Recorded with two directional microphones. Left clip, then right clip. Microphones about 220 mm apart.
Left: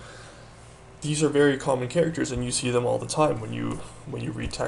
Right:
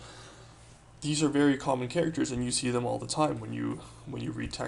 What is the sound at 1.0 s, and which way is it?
Speech, 20° right (ahead or behind).